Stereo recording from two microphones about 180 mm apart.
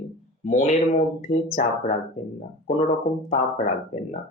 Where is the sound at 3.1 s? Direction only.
45° left (ahead or behind).